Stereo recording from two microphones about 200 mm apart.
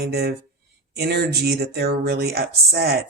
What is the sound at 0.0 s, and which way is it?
Speech, 55° right (ahead or behind).